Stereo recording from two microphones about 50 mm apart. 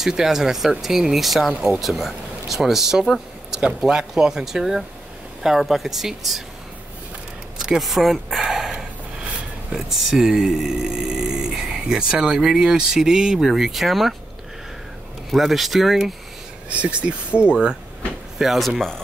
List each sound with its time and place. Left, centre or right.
0.0 s speech: centre
1.8 s speech: centre
7.5 s a sound: centre
9.7 s speech: centre
15.3 s speech: centre
16.6 s speech: right
18.4 s speech: centre